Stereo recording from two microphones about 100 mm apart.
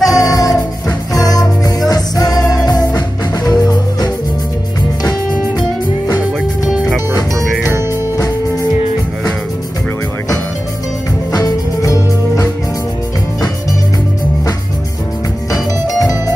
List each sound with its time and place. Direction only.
0.0 s music: 35° left (ahead or behind)
5.6 s music: 35° left (ahead or behind)
6.6 s music: centre (ahead or behind)
11.3 s music: 35° left (ahead or behind)
15.5 s music: 35° left (ahead or behind)